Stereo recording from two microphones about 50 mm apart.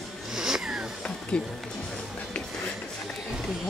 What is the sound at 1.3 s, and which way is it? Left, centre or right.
Speech, centre.